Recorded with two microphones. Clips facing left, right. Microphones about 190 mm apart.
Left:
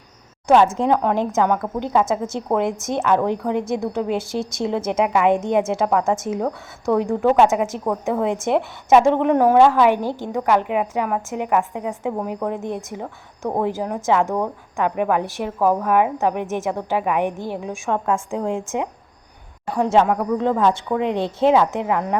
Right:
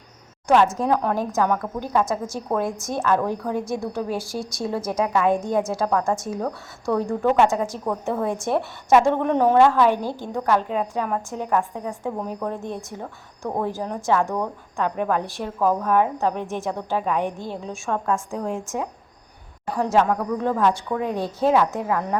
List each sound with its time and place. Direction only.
0.4 s speech: 5° left (ahead or behind)
0.7 s a woman's voice: 25° left (ahead or behind)
19.8 s a woman's voice: 20° left (ahead or behind)